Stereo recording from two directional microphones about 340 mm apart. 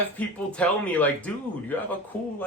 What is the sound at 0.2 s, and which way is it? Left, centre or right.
Speech, centre.